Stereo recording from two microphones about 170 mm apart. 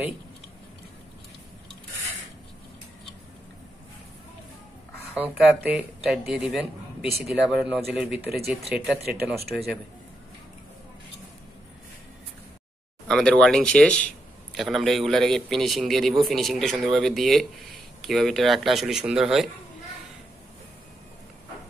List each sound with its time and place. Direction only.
5.1 s a man's voice: 10° right (ahead or behind)
9.5 s a man's voice: 10° left (ahead or behind)
13.1 s a man's voice: 5° left (ahead or behind)